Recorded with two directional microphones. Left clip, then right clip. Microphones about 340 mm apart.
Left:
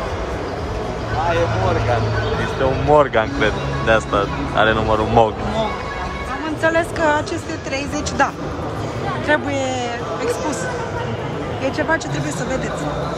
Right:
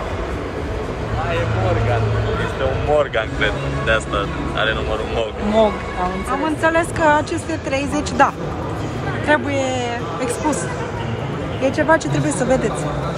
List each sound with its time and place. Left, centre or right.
3.0 s speech: centre
6.4 s speech: centre
9.3 s speech: centre
11.6 s speech: centre